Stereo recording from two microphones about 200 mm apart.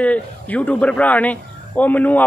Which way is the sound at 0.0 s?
5° left (ahead or behind).